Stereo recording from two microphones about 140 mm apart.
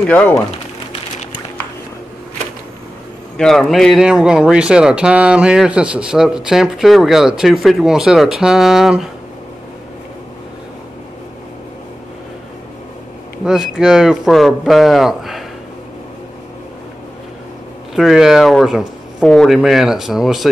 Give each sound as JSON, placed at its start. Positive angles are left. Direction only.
{"t": 3.3, "sound": "speech", "side_deg": 5}
{"t": 13.5, "sound": "speech", "side_deg": -5}
{"t": 17.9, "sound": "speech", "side_deg": 0}